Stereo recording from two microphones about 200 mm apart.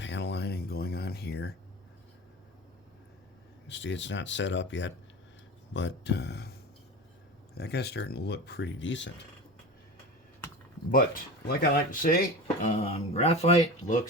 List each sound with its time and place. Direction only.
0.0 s a sound: 60° left (ahead or behind)
3.7 s speech: 65° left (ahead or behind)
11.4 s speech: 50° left (ahead or behind)
12.6 s speech: 30° left (ahead or behind)